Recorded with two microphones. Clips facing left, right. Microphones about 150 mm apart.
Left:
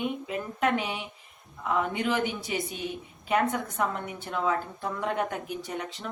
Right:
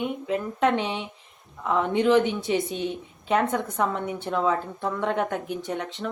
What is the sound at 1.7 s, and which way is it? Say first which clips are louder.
Speech: right 8 dB; 5° left (ahead or behind).